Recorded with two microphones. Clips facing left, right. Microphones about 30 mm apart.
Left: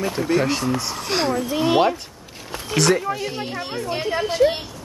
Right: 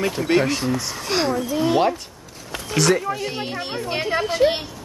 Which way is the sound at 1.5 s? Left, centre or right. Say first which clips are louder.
Left 1 dB; left.